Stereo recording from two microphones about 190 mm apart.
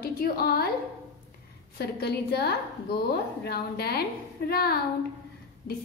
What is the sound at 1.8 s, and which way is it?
A woman's voice, 60° left (ahead or behind).